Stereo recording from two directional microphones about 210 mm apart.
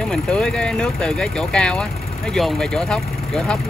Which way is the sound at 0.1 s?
5° left (ahead or behind).